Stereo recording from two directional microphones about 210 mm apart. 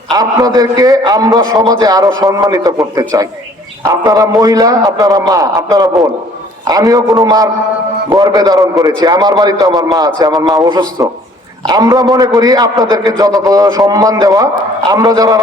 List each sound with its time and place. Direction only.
0.1 s a man's voice: 20° right (ahead or behind)